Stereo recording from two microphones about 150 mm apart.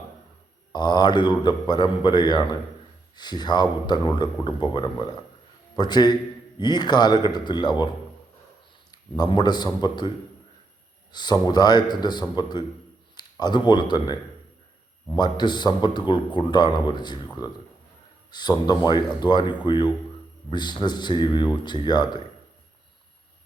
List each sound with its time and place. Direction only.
0.7 s speech: 30° left (ahead or behind)
8.9 s speech: 25° left (ahead or behind)
11.1 s speech: 30° left (ahead or behind)